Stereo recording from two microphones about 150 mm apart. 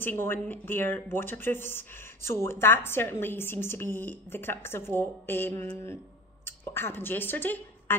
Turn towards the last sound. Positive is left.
turn(degrees=15)  # may be behind; listen again after turning